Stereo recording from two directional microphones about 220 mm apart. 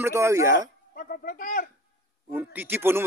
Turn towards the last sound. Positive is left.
turn(degrees=-10)  # may be behind; listen again after turning